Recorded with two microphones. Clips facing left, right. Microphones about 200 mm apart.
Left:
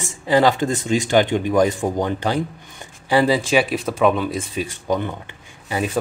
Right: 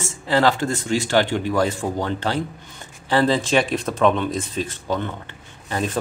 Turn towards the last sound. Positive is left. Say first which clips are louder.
# left 1 dB
turn(degrees=10)  # may be behind; listen again after turning